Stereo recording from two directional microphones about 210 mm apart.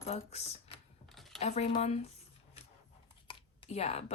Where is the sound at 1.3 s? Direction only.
30° left (ahead or behind).